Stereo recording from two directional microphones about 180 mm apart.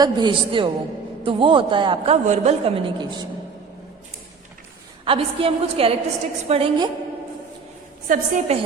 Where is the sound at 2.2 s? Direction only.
40° right (ahead or behind).